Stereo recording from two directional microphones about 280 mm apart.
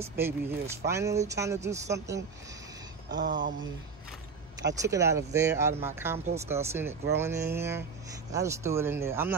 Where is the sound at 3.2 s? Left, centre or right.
Right.